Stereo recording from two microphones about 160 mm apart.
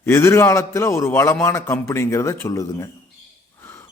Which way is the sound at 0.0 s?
15° left (ahead or behind).